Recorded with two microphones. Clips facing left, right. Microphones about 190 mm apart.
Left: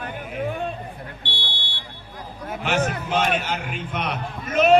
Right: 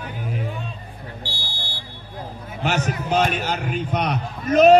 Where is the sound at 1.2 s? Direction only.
25° left (ahead or behind).